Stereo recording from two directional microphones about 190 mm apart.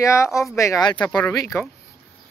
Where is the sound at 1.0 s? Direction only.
5° left (ahead or behind).